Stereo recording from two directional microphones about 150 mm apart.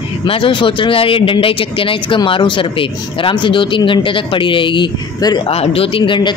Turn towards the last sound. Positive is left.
turn(degrees=35)  # may be behind; listen again after turning